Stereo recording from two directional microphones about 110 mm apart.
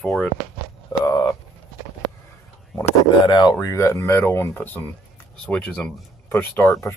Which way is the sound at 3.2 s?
40° left (ahead or behind).